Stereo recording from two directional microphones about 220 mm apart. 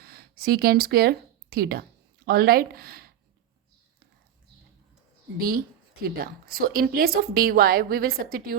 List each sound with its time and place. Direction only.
0.0 s speech: 45° right (ahead or behind)
6.0 s a woman's voice: 45° right (ahead or behind)